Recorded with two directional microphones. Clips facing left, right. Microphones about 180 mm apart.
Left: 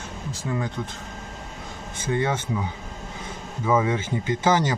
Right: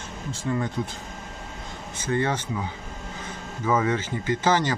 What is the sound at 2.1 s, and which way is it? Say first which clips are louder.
Speech: even; 15° left (ahead or behind).